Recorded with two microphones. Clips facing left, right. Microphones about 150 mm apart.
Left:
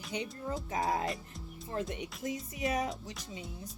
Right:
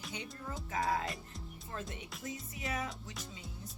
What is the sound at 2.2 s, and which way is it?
Music, 40° left (ahead or behind).